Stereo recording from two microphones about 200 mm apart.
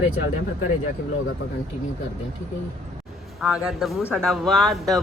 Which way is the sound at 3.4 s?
Centre (ahead or behind).